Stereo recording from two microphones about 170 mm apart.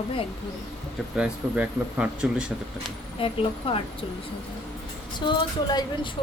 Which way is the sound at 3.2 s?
35° left (ahead or behind).